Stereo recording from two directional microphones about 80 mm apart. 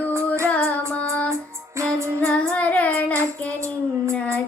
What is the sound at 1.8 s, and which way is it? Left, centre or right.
Music, right.